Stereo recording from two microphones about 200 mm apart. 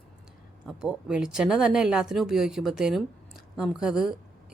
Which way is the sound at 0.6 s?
5° right (ahead or behind).